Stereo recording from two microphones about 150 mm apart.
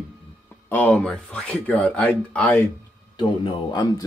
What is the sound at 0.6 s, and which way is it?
Speech, 10° left (ahead or behind).